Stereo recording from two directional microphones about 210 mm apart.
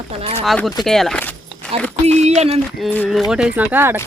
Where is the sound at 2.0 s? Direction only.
30° right (ahead or behind).